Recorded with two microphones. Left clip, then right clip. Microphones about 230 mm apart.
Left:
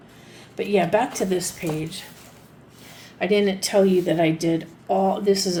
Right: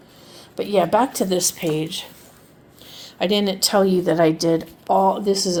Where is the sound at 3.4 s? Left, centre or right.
Right.